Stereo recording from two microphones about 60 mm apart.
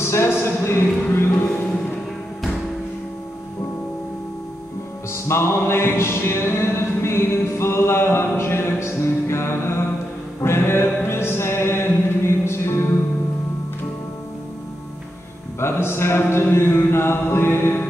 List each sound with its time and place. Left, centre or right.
0.0 s speech: left
5.1 s music: left
15.6 s music: left